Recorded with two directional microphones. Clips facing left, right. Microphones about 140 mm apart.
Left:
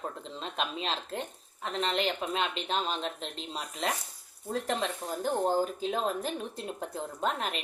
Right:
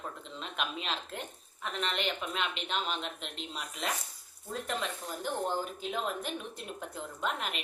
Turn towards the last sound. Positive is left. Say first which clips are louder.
# left 4 dB
turn(degrees=35)  # may be behind; listen again after turning